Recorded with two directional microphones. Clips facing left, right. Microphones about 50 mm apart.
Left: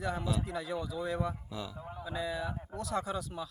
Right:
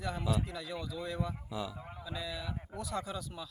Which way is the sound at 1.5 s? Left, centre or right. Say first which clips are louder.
Right 2 dB; centre.